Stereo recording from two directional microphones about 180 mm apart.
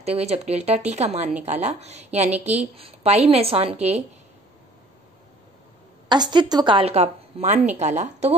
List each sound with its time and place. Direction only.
0.0 s a woman's voice: 35° right (ahead or behind)
6.0 s a woman's voice: 25° right (ahead or behind)